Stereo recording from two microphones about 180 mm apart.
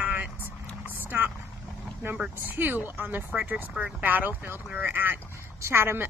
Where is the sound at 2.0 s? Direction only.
10° right (ahead or behind).